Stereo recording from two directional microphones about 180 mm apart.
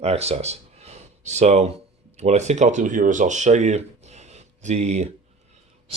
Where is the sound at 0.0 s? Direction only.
35° right (ahead or behind).